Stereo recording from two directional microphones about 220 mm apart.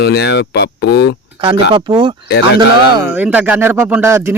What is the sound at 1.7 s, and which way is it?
Speech, 25° right (ahead or behind).